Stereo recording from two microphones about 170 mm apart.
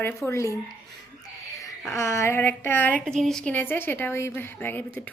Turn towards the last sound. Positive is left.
turn(degrees=10)  # may be behind; listen again after turning